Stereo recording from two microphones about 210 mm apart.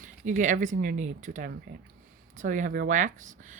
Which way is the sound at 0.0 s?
35° right (ahead or behind).